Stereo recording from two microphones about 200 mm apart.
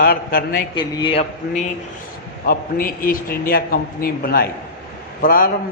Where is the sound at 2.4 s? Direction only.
45° left (ahead or behind).